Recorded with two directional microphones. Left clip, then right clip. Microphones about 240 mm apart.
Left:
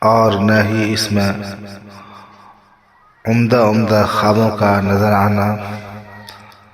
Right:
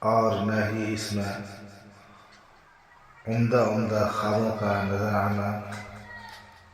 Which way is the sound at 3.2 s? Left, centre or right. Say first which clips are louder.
Left 11 dB; left.